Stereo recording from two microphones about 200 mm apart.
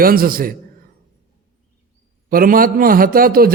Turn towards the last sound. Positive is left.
turn(degrees=-45)  # may be behind; listen again after turning